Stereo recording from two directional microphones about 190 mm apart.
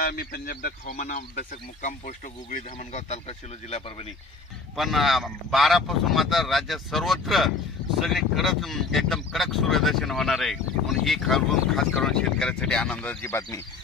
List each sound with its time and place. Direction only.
0.0 s speech: 50° left (ahead or behind); by 4.1 s 35° left (ahead or behind)
4.7 s speech: centre (ahead or behind); by 13.6 s 15° left (ahead or behind)